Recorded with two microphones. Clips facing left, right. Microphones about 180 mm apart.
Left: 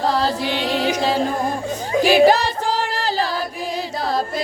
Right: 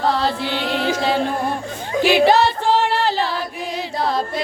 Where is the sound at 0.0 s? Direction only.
40° left (ahead or behind).